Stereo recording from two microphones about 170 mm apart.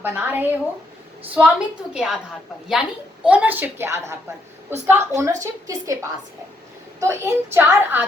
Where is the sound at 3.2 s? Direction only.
10° right (ahead or behind).